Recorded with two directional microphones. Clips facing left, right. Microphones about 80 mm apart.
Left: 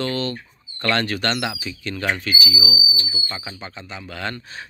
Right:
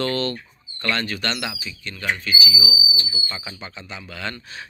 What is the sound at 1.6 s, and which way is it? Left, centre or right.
Speech, left.